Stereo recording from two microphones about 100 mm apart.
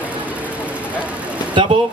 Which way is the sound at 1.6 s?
55° right (ahead or behind).